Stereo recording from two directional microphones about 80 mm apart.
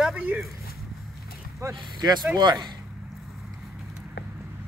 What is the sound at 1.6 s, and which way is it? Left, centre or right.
Speech, right.